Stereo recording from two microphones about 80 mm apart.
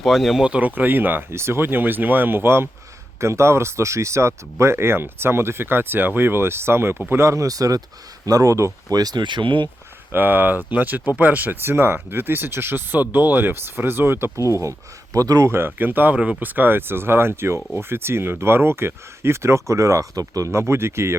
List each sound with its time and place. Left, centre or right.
0.0 s speech: centre
0.4 s speech: centre; by 9.0 s right
9.0 s speech: right
10.1 s speech: right
15.4 s speech: right